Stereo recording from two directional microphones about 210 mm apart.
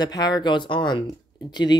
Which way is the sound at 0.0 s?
20° left (ahead or behind).